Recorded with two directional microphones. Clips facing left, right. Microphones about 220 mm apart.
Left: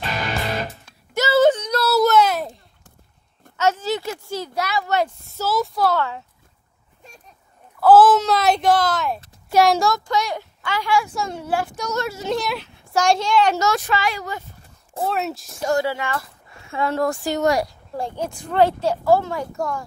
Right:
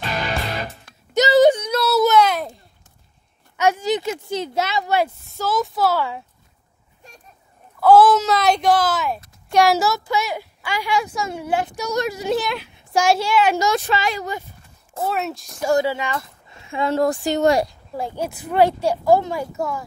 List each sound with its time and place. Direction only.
1.1 s a sound: 15° right (ahead or behind)
1.7 s a sound: centre (ahead or behind)
3.5 s speech: 15° right (ahead or behind)
4.8 s speech: 10° right (ahead or behind)
7.8 s speech: centre (ahead or behind)
13.7 s speech: 25° right (ahead or behind)
15.0 s speech: centre (ahead or behind)
15.7 s speech: 15° right (ahead or behind)
17.9 s speech: 5° right (ahead or behind)